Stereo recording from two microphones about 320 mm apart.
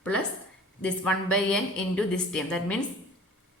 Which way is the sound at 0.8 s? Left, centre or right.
Centre.